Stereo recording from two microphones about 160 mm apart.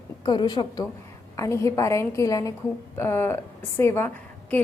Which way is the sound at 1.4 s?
20° left (ahead or behind).